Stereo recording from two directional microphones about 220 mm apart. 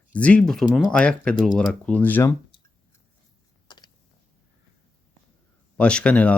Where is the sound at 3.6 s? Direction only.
20° left (ahead or behind).